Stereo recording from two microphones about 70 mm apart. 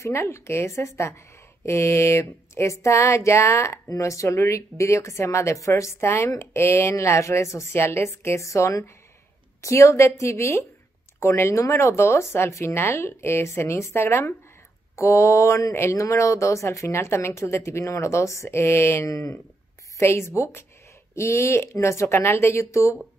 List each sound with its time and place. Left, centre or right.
0.0 s speech: left
19.0 s speech: left
20.0 s speech: left